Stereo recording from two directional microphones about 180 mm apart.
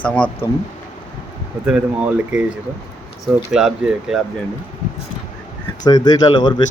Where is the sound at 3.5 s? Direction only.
5° right (ahead or behind).